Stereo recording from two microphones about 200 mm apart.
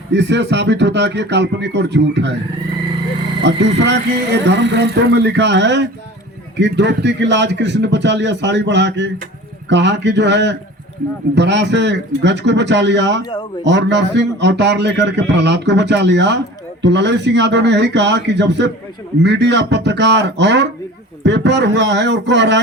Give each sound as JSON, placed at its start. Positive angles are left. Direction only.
{"t": 0.1, "sound": "a man's voice", "side_deg": -60}
{"t": 3.4, "sound": "a man's voice", "side_deg": -60}